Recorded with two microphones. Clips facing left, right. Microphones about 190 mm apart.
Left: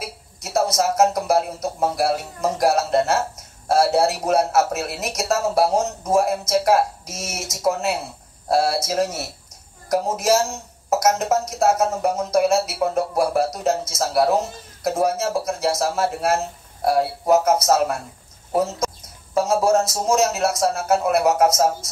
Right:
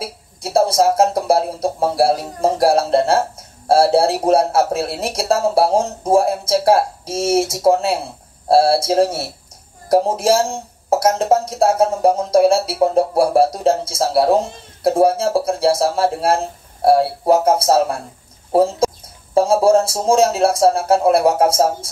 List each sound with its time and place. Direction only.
0.0 s speech: 30° right (ahead or behind)